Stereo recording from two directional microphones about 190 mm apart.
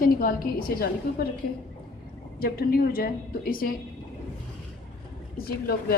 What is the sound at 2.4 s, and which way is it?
A woman's voice, 55° left (ahead or behind).